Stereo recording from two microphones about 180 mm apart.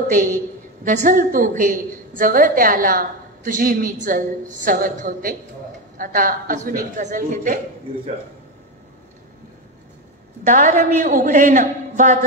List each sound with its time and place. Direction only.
0.1 s a woman's voice: 45° right (ahead or behind)
10.4 s a woman's voice: 45° right (ahead or behind)